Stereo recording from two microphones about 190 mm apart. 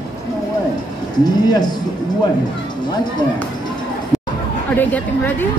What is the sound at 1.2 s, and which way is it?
Speech, 20° left (ahead or behind).